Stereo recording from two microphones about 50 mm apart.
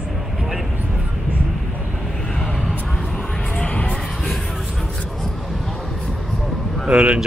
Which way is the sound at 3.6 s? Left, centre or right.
Left.